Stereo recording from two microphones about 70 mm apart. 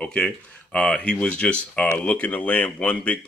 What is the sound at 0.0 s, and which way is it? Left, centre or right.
Speech, centre.